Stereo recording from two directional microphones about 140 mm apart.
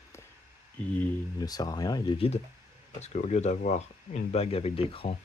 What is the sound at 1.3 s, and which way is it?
Speech, 25° left (ahead or behind).